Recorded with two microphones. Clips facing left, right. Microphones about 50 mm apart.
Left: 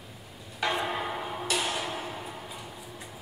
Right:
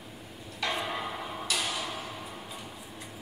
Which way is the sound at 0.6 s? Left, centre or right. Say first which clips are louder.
Left 3 dB; left.